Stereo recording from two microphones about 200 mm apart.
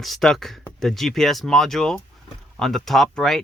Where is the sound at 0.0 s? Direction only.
Centre (ahead or behind).